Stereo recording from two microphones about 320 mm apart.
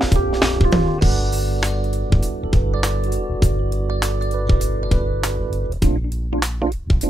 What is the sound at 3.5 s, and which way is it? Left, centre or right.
Music, left.